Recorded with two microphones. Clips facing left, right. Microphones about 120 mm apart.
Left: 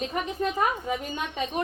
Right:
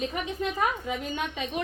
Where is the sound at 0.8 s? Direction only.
40° left (ahead or behind).